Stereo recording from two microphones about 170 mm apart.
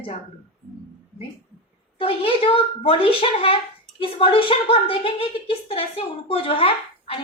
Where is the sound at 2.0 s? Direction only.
35° left (ahead or behind).